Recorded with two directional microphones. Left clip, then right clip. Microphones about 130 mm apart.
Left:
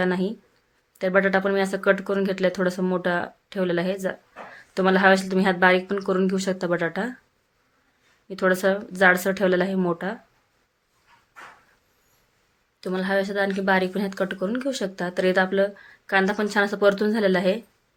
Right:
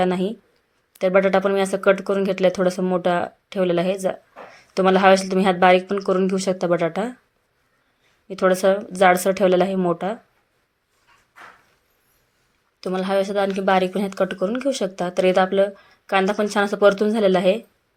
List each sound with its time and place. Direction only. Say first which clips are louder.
0.0 s speech: right 3 dB; 20° right (ahead or behind)
8.3 s speech: right 4 dB; 15° right (ahead or behind)
12.8 s speech: right 3 dB; 20° right (ahead or behind)